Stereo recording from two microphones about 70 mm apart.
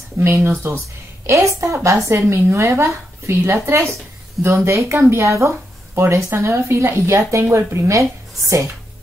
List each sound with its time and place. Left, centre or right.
0.2 s a woman's voice: right